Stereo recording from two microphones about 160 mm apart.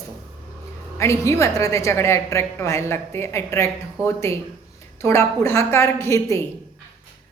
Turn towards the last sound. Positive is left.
turn(degrees=15)  # may be behind; listen again after turning